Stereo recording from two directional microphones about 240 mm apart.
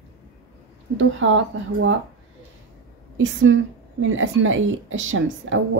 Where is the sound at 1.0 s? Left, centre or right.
Right.